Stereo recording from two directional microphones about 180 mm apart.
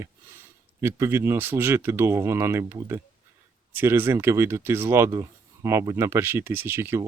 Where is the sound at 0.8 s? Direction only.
15° right (ahead or behind).